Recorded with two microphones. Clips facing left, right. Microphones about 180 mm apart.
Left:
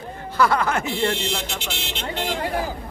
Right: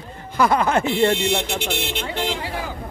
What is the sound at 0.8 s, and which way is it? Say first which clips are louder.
Speech: right 5 dB; 60° right (ahead or behind).